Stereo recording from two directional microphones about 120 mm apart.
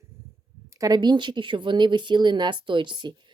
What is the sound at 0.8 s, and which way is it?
Speech, 35° right (ahead or behind).